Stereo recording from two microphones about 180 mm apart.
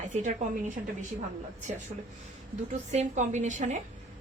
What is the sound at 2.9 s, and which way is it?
Speech, 40° right (ahead or behind).